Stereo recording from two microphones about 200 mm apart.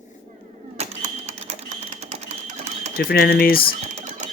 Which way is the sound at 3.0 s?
50° left (ahead or behind).